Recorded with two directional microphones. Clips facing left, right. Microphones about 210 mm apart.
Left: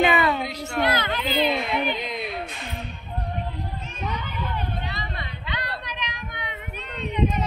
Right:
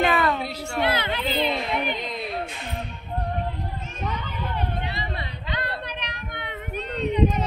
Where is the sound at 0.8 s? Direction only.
30° right (ahead or behind).